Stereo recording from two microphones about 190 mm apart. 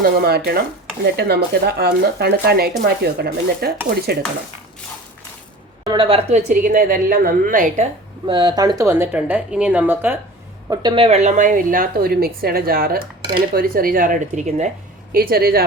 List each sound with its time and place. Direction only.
0.0 s speech: 55° right (ahead or behind)
5.8 s a woman's voice: 25° right (ahead or behind)
6.6 s a woman's voice: 50° right (ahead or behind)
8.3 s speech: 25° right (ahead or behind)
10.7 s a woman's voice: 25° right (ahead or behind)
15.1 s a woman's voice: 50° right (ahead or behind)